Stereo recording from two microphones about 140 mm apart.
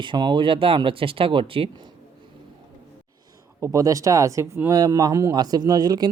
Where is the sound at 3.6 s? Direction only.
25° right (ahead or behind).